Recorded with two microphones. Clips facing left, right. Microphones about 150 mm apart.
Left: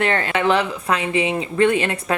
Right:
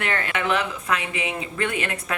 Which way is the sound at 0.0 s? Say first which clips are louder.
Left 7 dB; 30° left (ahead or behind).